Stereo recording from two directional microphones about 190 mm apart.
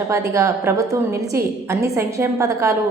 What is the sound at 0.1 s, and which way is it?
A woman's voice, 15° right (ahead or behind).